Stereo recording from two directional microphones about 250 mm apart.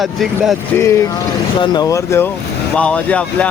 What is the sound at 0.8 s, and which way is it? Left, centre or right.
Speech, centre.